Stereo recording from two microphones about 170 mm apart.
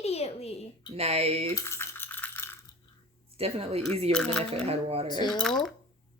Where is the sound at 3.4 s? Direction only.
35° right (ahead or behind).